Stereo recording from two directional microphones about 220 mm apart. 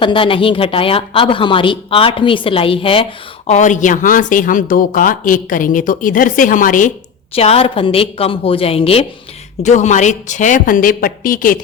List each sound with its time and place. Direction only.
0.0 s a woman's voice: 20° left (ahead or behind)
7.3 s a woman's voice: 25° left (ahead or behind)